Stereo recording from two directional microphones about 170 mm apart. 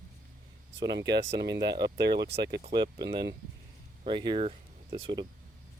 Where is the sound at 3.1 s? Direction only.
75° right (ahead or behind).